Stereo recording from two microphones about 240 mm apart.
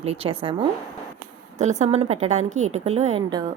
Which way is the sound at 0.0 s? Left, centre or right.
Right.